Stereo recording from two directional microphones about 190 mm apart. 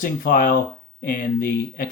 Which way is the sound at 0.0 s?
45° left (ahead or behind).